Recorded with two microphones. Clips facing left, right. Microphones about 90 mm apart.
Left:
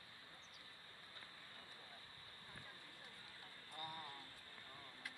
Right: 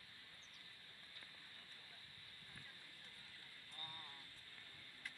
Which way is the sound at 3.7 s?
20° left (ahead or behind).